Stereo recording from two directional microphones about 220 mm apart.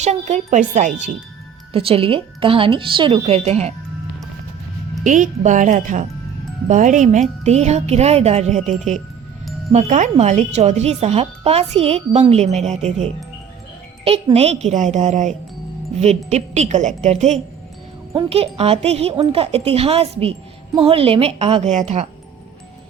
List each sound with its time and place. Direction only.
0.0 s a woman's voice: 30° right (ahead or behind)
5.0 s speech: 35° right (ahead or behind)
9.7 s a woman's voice: 30° right (ahead or behind)
14.0 s a woman's voice: 25° right (ahead or behind)